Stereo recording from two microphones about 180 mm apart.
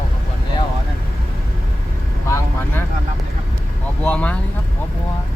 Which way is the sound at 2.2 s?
15° left (ahead or behind).